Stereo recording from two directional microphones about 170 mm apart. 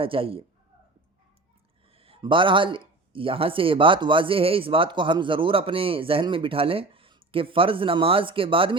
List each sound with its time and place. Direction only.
0.0 s speech: 30° right (ahead or behind)
2.0 s speech: 35° right (ahead or behind)